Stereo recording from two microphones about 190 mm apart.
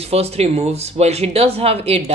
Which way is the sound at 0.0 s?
35° right (ahead or behind).